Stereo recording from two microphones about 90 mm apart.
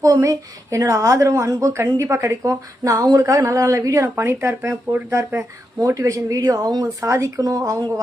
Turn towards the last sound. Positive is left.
turn(degrees=-40)  # may be behind; listen again after turning